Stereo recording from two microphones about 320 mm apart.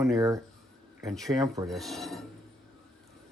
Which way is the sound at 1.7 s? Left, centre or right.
Centre.